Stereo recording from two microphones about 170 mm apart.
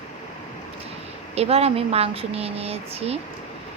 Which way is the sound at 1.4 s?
35° right (ahead or behind).